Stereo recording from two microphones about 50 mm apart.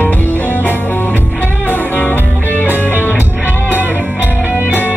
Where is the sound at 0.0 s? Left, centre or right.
Left.